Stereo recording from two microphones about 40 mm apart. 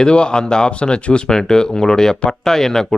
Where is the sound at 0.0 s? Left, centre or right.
Left.